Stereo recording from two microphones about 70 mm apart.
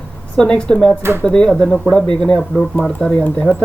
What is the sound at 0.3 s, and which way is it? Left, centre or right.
Speech, centre.